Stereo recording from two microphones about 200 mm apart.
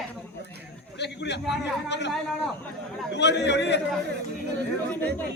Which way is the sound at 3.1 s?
60° left (ahead or behind).